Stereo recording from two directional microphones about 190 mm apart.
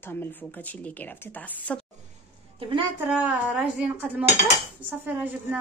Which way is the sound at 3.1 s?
5° right (ahead or behind).